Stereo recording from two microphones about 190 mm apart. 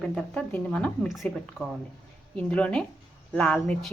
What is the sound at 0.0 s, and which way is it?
Speech, 5° left (ahead or behind).